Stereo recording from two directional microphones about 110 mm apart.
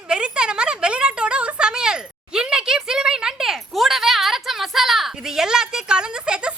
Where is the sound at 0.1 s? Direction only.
10° right (ahead or behind).